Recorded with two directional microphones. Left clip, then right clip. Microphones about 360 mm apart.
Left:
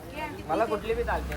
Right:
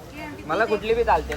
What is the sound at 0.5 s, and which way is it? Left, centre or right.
Speech, right.